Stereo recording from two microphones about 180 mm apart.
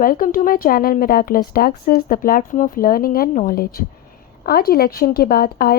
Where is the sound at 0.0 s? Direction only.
50° left (ahead or behind).